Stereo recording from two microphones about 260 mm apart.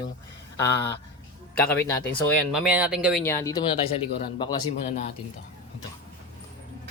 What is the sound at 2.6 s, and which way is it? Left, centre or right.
Speech, centre.